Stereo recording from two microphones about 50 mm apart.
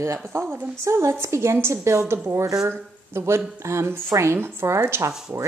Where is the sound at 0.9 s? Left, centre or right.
Right.